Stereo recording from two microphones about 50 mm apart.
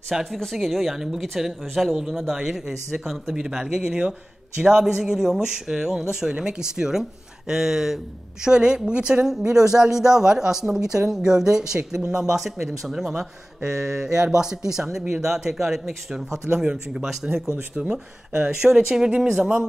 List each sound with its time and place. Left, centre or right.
0.1 s a woman's voice: centre